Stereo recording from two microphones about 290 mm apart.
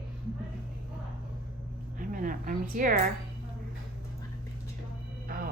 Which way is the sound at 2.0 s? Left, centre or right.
Right.